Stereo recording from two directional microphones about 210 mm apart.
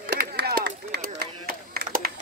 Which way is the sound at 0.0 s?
45° right (ahead or behind).